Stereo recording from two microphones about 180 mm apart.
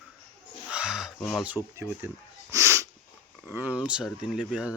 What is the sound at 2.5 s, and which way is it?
Sneeze, 15° right (ahead or behind).